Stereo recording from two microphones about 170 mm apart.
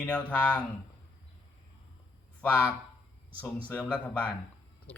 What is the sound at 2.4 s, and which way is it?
A man's voice, 10° left (ahead or behind).